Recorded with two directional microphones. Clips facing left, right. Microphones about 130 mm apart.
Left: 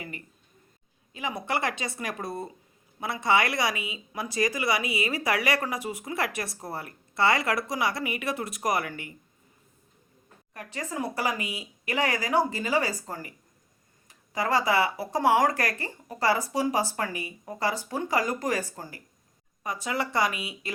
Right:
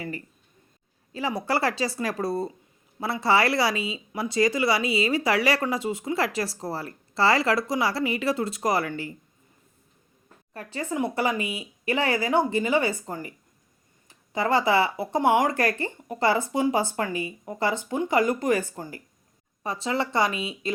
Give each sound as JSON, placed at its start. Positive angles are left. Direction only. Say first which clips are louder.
{"t": 1.3, "sound": "a woman's voice", "louder": "right 4 dB", "side_deg": -30}
{"t": 10.5, "sound": "a woman's voice", "louder": "right 4 dB", "side_deg": -30}